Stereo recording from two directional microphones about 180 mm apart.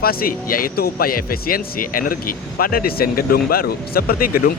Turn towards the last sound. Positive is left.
turn(degrees=55)  # may be behind; listen again after turning